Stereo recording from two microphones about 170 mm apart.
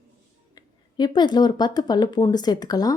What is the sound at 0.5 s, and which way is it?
Speech, 25° left (ahead or behind).